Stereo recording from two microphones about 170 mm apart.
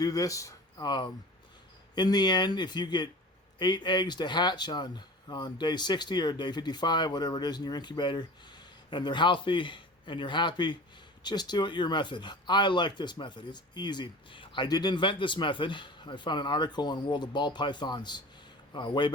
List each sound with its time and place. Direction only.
0.0 s speech: 20° left (ahead or behind)